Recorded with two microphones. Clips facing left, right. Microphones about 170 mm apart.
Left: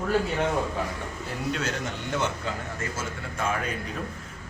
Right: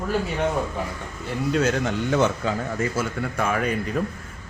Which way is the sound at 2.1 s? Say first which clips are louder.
Right 7 dB; 75° right (ahead or behind).